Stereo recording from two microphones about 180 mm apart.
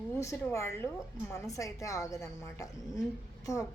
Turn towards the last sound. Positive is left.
turn(degrees=20)  # may be behind; listen again after turning